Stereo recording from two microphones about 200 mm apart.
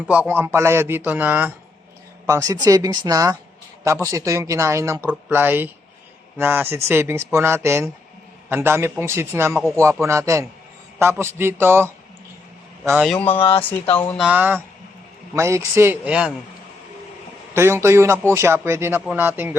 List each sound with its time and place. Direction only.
0.1 s speech: 10° right (ahead or behind)
13.1 s speech: 5° left (ahead or behind)
13.4 s speech: 25° left (ahead or behind)
14.2 s speech: 5° right (ahead or behind)
17.5 s speech: 10° right (ahead or behind)